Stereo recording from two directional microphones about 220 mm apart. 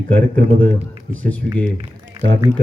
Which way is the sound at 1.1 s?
5° left (ahead or behind).